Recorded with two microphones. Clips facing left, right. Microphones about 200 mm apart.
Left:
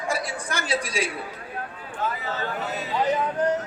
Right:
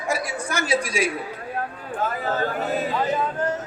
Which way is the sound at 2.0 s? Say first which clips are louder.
Right 4 dB; 50° right (ahead or behind).